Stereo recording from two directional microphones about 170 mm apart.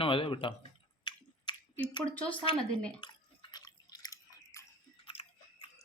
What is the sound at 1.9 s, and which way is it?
Speech, 30° left (ahead or behind).